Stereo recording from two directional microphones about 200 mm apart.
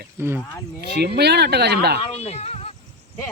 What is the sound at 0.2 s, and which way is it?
Speech, 10° right (ahead or behind).